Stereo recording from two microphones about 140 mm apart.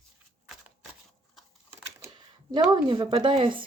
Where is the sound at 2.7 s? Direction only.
30° right (ahead or behind).